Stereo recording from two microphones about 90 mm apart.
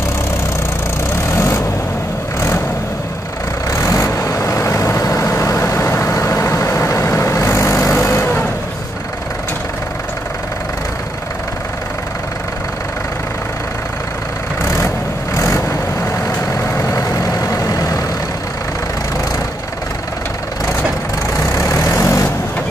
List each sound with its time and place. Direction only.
1.3 s vehicle: 30° left (ahead or behind)
3.7 s vehicle: 30° left (ahead or behind)
15.3 s vehicle: 30° left (ahead or behind)
21.3 s vehicle: 35° left (ahead or behind)